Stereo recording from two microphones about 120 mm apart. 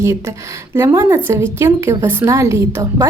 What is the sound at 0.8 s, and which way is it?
Speech, 20° right (ahead or behind).